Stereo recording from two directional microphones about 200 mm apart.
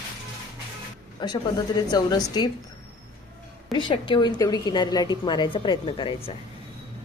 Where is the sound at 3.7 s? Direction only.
25° left (ahead or behind).